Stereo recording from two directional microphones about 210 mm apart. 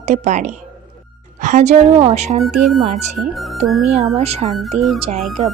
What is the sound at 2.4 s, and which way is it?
Speech, centre (ahead or behind).